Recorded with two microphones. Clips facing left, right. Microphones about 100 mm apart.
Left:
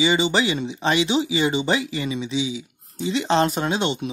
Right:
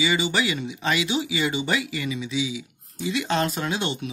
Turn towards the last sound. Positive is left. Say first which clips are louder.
# left 4 dB
turn(degrees=25)  # may be behind; listen again after turning